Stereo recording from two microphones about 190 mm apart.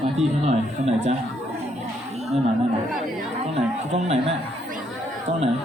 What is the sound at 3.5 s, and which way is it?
Speech, 35° right (ahead or behind).